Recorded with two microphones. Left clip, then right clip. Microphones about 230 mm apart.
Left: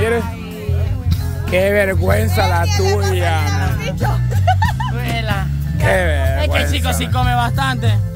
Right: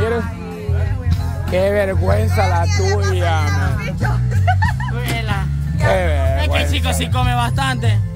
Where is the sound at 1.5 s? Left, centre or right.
Centre.